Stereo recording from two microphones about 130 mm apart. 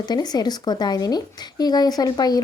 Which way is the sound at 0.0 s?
30° left (ahead or behind).